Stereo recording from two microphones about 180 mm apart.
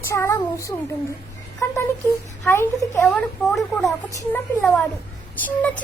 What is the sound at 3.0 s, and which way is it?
Speech, centre (ahead or behind).